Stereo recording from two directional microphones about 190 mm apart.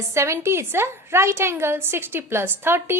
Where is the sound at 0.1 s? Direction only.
15° right (ahead or behind).